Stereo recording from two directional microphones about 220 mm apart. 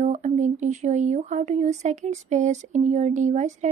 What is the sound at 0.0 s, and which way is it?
Speech, 30° right (ahead or behind).